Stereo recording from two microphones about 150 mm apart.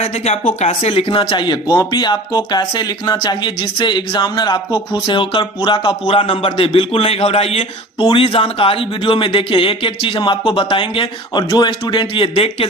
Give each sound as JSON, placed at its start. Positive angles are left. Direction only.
{"t": 0.0, "sound": "speech", "side_deg": 45}